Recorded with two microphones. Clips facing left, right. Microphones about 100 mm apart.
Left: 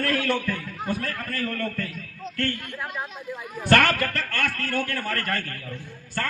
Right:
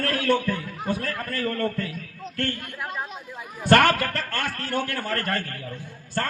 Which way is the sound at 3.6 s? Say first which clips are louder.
Right 2 dB; 30° right (ahead or behind).